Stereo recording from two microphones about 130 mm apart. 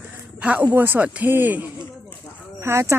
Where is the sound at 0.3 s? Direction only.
10° right (ahead or behind).